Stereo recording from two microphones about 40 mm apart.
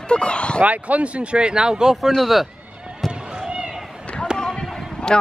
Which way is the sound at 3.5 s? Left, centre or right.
Right.